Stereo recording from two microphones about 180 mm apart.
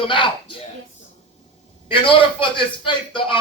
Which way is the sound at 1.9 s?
30° left (ahead or behind).